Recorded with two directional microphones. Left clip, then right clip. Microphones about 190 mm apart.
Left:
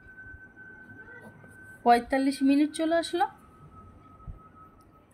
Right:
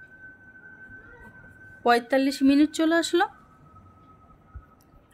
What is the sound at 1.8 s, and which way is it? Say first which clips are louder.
Speech: right 1 dB; 40° right (ahead or behind).